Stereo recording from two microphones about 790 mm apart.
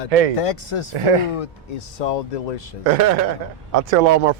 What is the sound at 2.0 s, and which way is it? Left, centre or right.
Speech, left.